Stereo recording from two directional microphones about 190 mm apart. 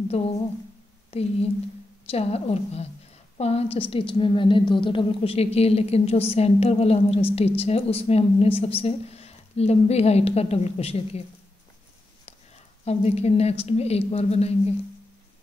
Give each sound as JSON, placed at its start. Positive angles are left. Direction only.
{"t": 0.1, "sound": "a woman's voice", "side_deg": 35}
{"t": 12.8, "sound": "speech", "side_deg": 35}